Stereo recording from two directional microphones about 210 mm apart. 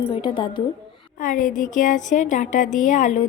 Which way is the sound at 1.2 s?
40° left (ahead or behind).